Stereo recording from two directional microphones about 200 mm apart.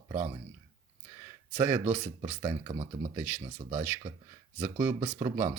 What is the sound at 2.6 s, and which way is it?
Speech, 30° right (ahead or behind).